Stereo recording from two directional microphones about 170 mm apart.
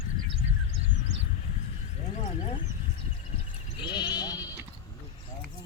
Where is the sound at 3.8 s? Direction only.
25° left (ahead or behind).